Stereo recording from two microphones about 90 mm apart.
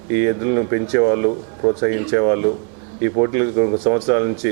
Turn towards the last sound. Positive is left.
turn(degrees=-20)  # may be behind; listen again after turning